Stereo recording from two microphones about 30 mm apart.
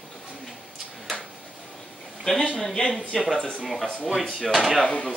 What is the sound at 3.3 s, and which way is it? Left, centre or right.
Speech, left.